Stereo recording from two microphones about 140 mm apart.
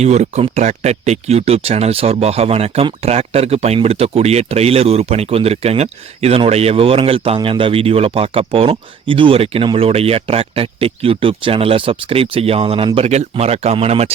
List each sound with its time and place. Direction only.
0.0 s speech: 50° right (ahead or behind)